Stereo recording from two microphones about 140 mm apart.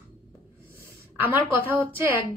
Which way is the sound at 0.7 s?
15° right (ahead or behind).